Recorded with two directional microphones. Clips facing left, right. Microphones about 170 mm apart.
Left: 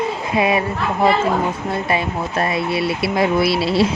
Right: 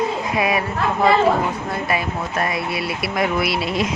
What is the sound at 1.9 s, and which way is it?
Speech, 25° left (ahead or behind).